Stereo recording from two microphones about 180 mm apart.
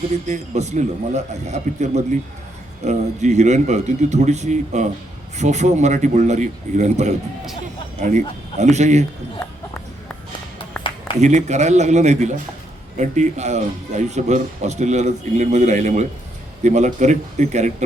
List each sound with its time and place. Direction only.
0.3 s speech: 40° right (ahead or behind)
11.2 s speech: 40° right (ahead or behind)